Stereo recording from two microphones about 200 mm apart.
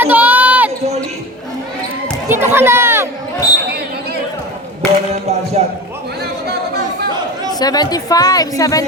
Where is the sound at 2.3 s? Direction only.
10° right (ahead or behind).